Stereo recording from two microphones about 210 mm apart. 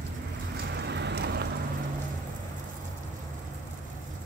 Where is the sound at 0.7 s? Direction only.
55° right (ahead or behind).